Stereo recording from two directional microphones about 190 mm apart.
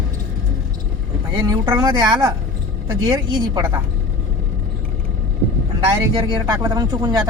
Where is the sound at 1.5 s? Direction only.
20° right (ahead or behind).